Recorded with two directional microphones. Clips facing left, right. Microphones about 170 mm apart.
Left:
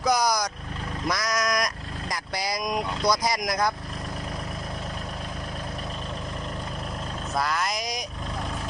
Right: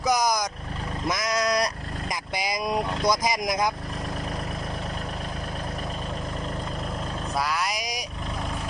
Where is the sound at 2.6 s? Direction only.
30° right (ahead or behind).